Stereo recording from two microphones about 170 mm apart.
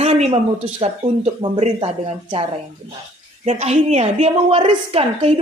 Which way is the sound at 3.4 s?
40° right (ahead or behind).